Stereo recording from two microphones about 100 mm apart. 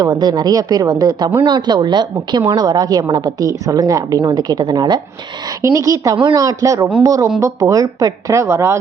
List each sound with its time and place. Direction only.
0.0 s a woman's voice: 45° right (ahead or behind)
4.2 s speech: 50° right (ahead or behind)
5.6 s a woman's voice: 30° right (ahead or behind)